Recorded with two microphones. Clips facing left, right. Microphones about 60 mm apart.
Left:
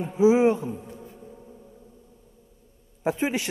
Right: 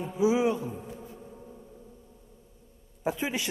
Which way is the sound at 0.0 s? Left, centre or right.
Left.